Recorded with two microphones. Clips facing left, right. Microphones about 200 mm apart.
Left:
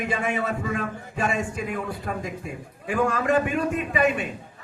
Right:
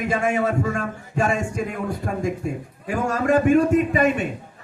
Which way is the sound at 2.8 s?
45° right (ahead or behind).